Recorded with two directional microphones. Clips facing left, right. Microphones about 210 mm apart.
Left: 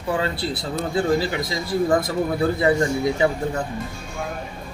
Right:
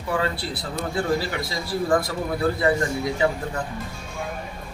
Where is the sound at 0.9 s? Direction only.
20° left (ahead or behind).